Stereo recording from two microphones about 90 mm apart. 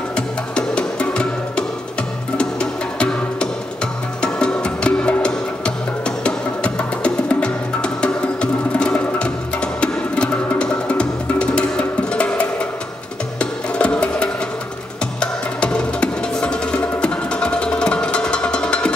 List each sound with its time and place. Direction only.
0.1 s music: 10° left (ahead or behind)
2.3 s music: 10° left (ahead or behind)